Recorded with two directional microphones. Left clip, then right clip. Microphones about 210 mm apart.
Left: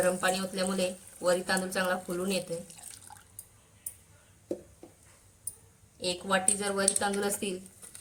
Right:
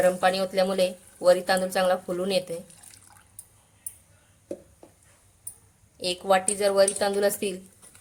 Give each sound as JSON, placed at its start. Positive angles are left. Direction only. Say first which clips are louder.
{"t": 0.0, "sound": "speech", "louder": "right 6 dB", "side_deg": -40}
{"t": 6.0, "sound": "speech", "louder": "right 7 dB", "side_deg": -45}